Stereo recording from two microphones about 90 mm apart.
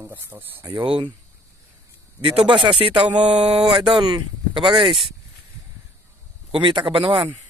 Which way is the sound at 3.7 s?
65° right (ahead or behind).